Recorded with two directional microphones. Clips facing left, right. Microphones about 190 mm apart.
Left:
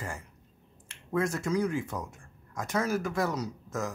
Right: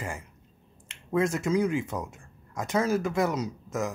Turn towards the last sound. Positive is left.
turn(degrees=-20)  # may be behind; listen again after turning